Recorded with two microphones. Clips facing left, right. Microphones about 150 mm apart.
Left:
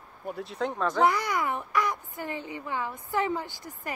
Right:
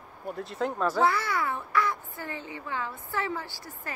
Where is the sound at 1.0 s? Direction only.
15° left (ahead or behind).